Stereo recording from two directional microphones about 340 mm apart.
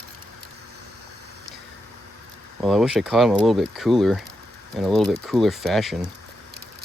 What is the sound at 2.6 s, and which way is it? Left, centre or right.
Speech, centre.